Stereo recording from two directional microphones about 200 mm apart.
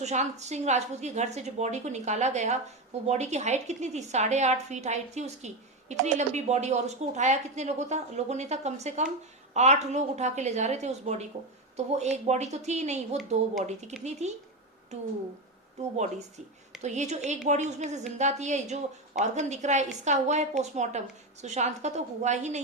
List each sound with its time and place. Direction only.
0.0 s a woman's voice: 35° right (ahead or behind)
16.8 s a woman's voice: 35° right (ahead or behind)